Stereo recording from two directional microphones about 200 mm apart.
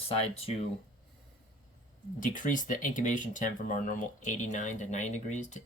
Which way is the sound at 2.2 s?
40° left (ahead or behind).